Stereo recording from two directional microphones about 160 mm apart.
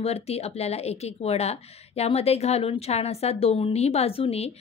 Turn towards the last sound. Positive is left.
turn(degrees=40)  # may be behind; listen again after turning